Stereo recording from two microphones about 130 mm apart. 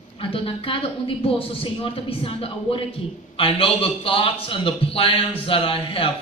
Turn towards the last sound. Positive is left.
turn(degrees=45)  # may be behind; listen again after turning